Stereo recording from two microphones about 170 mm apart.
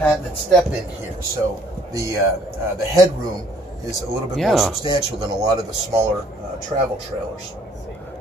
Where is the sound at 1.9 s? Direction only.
15° right (ahead or behind).